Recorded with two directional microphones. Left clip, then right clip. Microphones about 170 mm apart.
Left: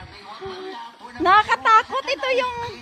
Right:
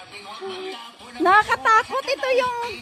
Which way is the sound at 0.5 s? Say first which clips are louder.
Right 1 dB; 25° right (ahead or behind).